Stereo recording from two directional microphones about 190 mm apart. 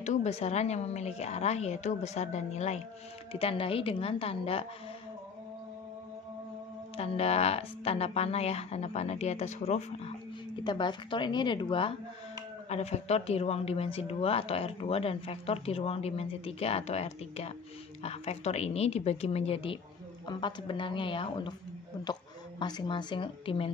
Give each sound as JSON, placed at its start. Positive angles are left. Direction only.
{"t": 0.0, "sound": "speech", "side_deg": 35}
{"t": 7.0, "sound": "speech", "side_deg": 30}
{"t": 10.6, "sound": "a woman's voice", "side_deg": 25}
{"t": 22.6, "sound": "a woman's voice", "side_deg": 20}